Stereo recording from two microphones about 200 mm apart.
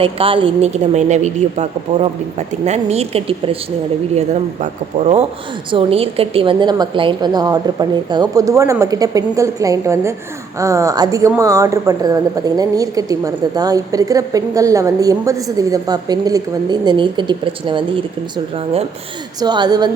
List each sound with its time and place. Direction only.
0.0 s a woman's voice: 25° right (ahead or behind)
4.6 s a woman's voice: 35° right (ahead or behind)